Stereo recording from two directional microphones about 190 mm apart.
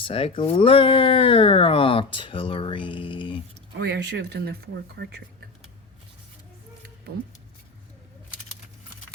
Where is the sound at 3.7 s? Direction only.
60° right (ahead or behind).